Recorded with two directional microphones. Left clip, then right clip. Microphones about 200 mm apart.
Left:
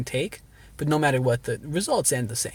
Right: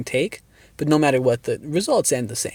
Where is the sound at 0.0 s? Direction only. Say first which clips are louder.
Right 6 dB; 40° right (ahead or behind).